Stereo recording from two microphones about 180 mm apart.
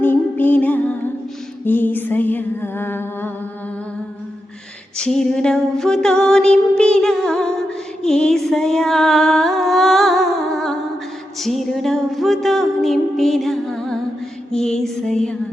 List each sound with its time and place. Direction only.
0.0 s music: 10° left (ahead or behind)
4.9 s music: 5° left (ahead or behind)